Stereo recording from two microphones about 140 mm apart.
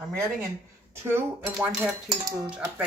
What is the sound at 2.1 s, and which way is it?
Dishes, 25° right (ahead or behind).